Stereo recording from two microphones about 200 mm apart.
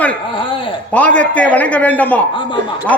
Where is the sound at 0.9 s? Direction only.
5° left (ahead or behind).